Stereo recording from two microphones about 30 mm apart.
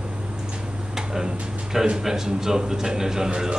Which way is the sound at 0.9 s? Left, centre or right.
Centre.